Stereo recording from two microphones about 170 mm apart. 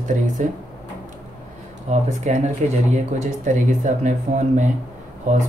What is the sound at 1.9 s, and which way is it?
Speech, 40° right (ahead or behind).